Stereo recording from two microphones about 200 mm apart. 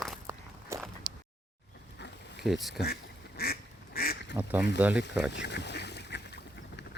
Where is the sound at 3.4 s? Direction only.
50° left (ahead or behind).